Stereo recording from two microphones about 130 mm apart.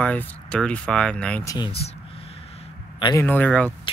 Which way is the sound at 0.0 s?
10° left (ahead or behind).